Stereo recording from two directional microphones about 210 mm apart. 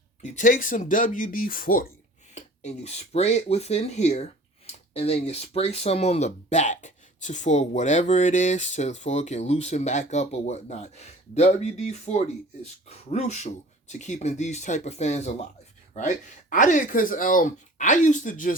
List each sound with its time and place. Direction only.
0.2 s speech: 35° left (ahead or behind)
2.3 s speech: 30° left (ahead or behind)